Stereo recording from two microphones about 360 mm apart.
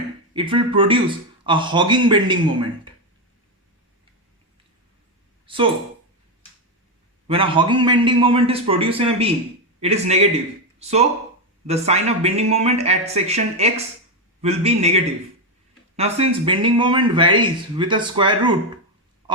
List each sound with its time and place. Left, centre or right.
0.3 s speech: centre
7.3 s speech: centre